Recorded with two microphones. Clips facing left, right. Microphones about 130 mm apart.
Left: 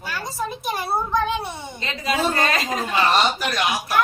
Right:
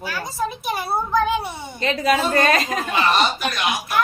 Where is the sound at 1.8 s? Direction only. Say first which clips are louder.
Right 4 dB; 50° right (ahead or behind).